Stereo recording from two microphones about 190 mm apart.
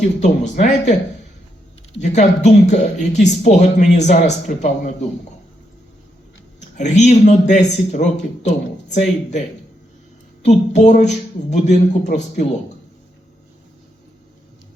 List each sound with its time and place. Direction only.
0.2 s speech: 40° left (ahead or behind)
6.6 s speech: 40° left (ahead or behind)
10.4 s speech: 40° left (ahead or behind)